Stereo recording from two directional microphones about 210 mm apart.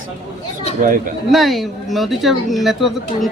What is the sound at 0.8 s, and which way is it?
Speech, 40° right (ahead or behind).